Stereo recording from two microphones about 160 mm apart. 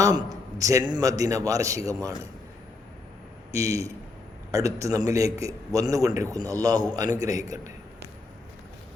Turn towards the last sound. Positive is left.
turn(degrees=-20)  # may be behind; listen again after turning